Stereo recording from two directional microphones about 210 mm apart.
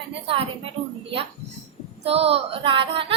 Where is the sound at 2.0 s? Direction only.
30° right (ahead or behind).